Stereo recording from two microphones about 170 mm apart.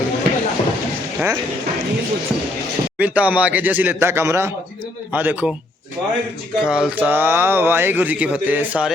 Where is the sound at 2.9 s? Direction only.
10° right (ahead or behind).